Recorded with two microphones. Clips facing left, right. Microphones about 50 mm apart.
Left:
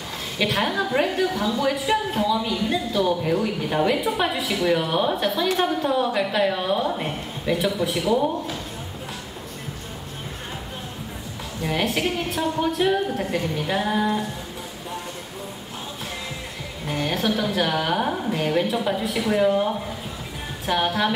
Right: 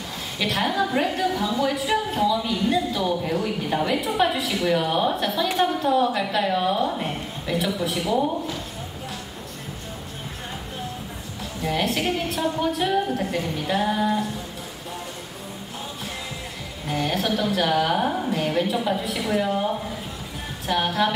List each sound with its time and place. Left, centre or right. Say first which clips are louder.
0.4 s a woman's voice: even; centre
11.6 s a woman's voice: even; centre
16.8 s a woman's voice: even; centre
20.6 s a woman's voice: even; centre